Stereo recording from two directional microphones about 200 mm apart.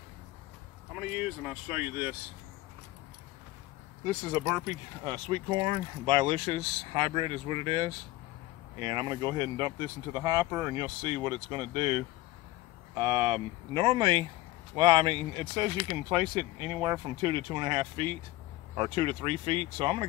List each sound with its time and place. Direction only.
0.9 s speech: 5° right (ahead or behind)
4.3 s speech: 15° right (ahead or behind)
13.0 s speech: 25° right (ahead or behind)